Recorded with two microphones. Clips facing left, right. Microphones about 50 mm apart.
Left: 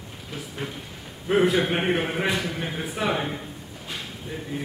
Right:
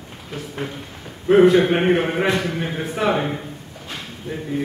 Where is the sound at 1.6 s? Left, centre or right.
Centre.